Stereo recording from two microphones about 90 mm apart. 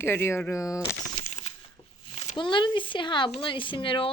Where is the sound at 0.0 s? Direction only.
25° left (ahead or behind).